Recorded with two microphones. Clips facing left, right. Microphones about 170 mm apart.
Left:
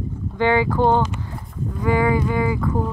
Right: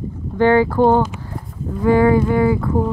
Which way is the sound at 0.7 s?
5° right (ahead or behind).